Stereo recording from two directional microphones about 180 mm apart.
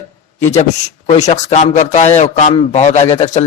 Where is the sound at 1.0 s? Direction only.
40° left (ahead or behind).